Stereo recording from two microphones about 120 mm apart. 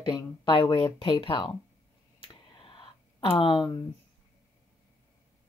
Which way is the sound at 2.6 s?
45° left (ahead or behind).